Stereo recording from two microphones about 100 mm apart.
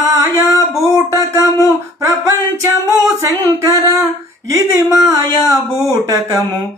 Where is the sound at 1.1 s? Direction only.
35° right (ahead or behind).